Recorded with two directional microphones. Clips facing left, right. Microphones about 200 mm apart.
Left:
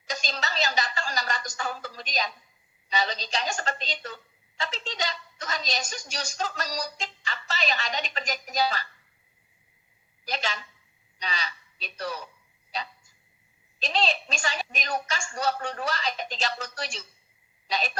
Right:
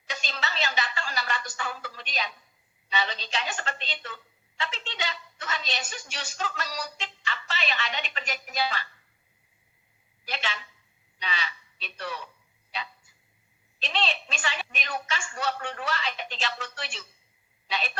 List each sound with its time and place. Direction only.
0.1 s a woman's voice: 40° left (ahead or behind)
10.2 s a woman's voice: 40° left (ahead or behind)
13.7 s a woman's voice: 40° left (ahead or behind)